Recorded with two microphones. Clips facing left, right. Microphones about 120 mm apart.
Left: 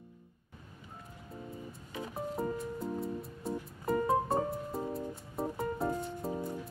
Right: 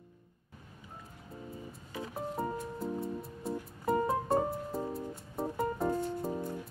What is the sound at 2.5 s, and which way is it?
Music, centre (ahead or behind).